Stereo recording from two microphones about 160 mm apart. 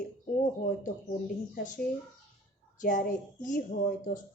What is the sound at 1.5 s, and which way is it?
Speech, 55° left (ahead or behind).